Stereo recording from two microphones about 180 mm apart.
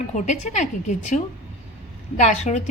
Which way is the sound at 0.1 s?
40° left (ahead or behind).